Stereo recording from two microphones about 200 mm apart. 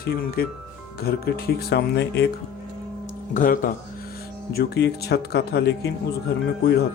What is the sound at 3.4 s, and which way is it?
Speech, 40° left (ahead or behind).